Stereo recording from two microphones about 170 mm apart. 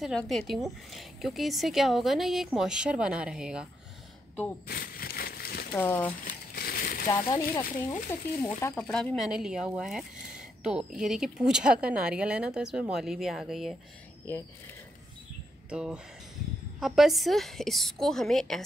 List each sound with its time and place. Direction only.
0.0 s speech: centre (ahead or behind)
4.6 s a sound: 60° left (ahead or behind)
5.7 s speech: 10° left (ahead or behind)
6.2 s crumpling: 60° left (ahead or behind)
7.1 s speech: 20° left (ahead or behind); by 13.7 s centre (ahead or behind)
15.7 s speech: 5° right (ahead or behind)